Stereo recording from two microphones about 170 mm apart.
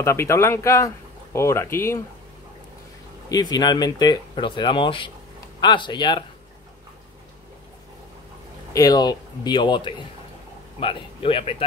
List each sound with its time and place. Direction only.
0.0 s speech: 15° left (ahead or behind)
3.3 s speech: 20° left (ahead or behind)
8.7 s speech: 25° left (ahead or behind)